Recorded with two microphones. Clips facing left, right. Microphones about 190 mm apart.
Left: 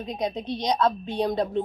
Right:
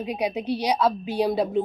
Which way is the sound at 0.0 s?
10° right (ahead or behind).